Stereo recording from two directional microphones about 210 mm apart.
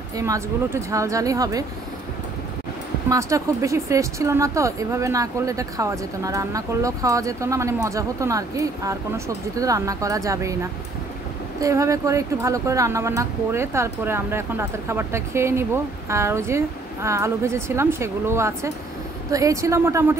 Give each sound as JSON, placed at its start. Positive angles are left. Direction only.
{"t": 0.2, "sound": "speech", "side_deg": -15}
{"t": 3.1, "sound": "speech", "side_deg": -15}